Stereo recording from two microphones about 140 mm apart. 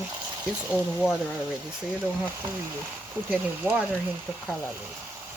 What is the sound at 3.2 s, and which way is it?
Speech, 10° right (ahead or behind).